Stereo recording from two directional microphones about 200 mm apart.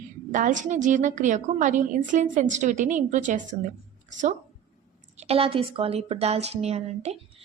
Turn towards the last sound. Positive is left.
turn(degrees=-35)  # may be behind; listen again after turning